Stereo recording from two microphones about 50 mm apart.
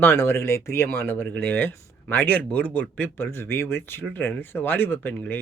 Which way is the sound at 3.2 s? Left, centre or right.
Left.